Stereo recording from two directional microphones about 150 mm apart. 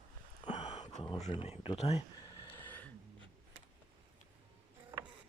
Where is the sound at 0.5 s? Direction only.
45° left (ahead or behind).